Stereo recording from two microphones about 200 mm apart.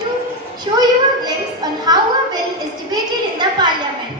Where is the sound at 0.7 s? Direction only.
25° right (ahead or behind).